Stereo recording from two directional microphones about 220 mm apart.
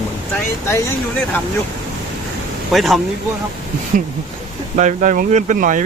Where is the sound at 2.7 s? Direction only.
Centre (ahead or behind).